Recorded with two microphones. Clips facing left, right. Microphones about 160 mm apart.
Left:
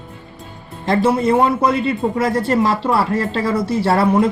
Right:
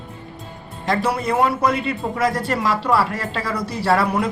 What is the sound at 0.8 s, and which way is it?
A man's voice, 25° left (ahead or behind).